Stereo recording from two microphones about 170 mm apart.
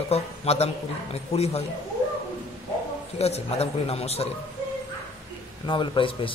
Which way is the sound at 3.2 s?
35° left (ahead or behind).